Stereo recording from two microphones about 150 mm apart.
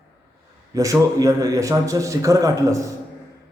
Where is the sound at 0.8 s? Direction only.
20° right (ahead or behind).